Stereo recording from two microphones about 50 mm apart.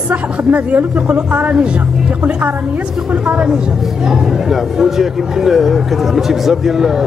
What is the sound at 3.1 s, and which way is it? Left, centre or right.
Speech, right.